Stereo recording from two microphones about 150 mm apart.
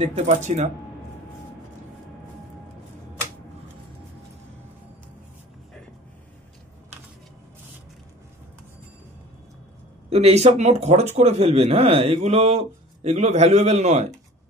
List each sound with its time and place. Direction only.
0.0 s speech: 50° right (ahead or behind)
10.0 s speech: 45° right (ahead or behind)